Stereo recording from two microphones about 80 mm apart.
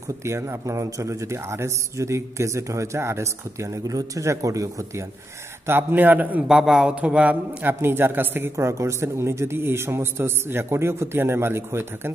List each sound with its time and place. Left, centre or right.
0.2 s a man's voice: right
5.7 s a man's voice: right
6.4 s a man's voice: centre
7.6 s a man's voice: right